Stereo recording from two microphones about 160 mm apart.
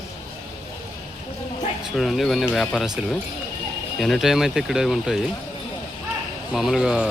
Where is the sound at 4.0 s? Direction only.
Centre (ahead or behind).